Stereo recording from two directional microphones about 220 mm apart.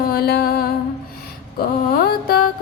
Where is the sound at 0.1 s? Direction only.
45° left (ahead or behind).